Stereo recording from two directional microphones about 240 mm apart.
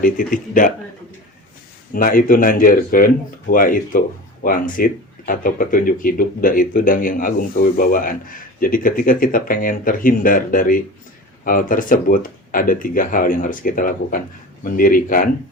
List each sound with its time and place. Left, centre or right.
0.0 s speech: left
1.9 s speech: left